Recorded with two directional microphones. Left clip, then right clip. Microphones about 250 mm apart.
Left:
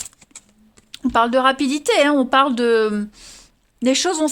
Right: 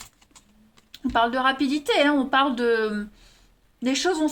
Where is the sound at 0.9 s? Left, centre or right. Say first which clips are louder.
Left 6 dB; left.